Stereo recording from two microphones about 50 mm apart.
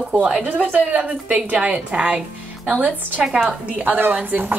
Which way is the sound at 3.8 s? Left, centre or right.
Right.